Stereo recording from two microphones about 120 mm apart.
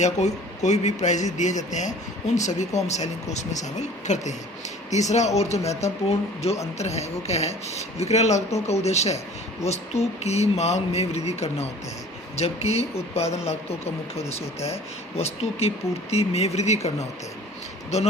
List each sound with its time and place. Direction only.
0.0 s speech: 70° left (ahead or behind)